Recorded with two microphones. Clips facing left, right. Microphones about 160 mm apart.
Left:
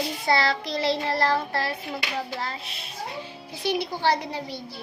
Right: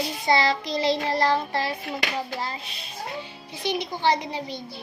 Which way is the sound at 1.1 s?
15° right (ahead or behind).